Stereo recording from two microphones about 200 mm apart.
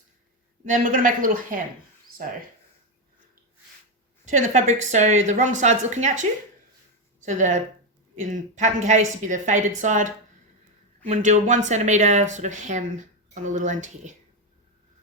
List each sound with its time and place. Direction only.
0.6 s a woman's voice: 40° right (ahead or behind)
4.3 s speech: 35° right (ahead or behind)
7.3 s speech: 40° right (ahead or behind)
11.1 s speech: 35° right (ahead or behind)